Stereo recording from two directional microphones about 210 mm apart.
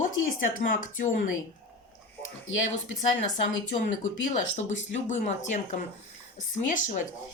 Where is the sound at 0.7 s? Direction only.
40° left (ahead or behind).